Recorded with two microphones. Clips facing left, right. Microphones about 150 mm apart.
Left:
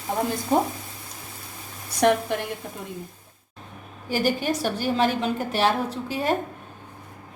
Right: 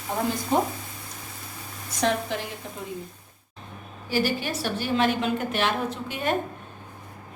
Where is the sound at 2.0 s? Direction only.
55° left (ahead or behind).